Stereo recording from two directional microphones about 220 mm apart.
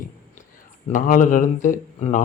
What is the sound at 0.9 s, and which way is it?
Speech, 35° left (ahead or behind).